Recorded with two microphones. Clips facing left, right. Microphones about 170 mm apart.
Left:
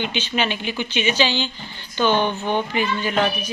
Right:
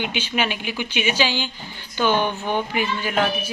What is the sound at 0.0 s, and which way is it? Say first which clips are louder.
A woman's voice: left 1 dB; 10° right (ahead or behind).